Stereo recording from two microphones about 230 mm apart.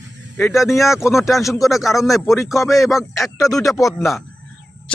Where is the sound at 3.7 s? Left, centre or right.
Centre.